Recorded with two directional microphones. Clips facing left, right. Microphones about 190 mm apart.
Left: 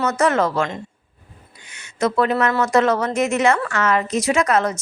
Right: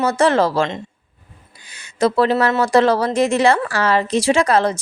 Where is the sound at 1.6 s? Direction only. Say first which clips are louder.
Right 4 dB; 35° right (ahead or behind).